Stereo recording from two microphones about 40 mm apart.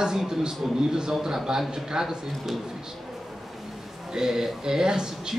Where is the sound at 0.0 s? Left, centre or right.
Centre.